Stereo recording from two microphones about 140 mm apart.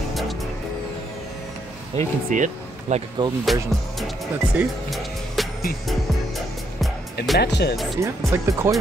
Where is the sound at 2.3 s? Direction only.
60° right (ahead or behind).